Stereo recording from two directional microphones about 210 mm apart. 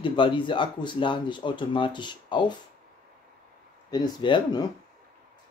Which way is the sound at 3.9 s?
20° left (ahead or behind).